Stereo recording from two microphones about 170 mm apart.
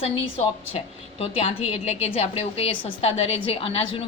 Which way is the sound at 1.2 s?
40° left (ahead or behind).